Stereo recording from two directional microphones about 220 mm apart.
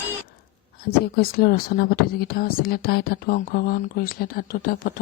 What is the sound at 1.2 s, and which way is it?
Speech, 45° left (ahead or behind).